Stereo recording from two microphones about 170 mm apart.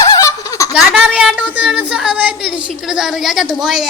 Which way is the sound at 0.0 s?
20° left (ahead or behind).